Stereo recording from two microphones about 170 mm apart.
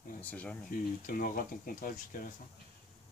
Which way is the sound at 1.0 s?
55° left (ahead or behind).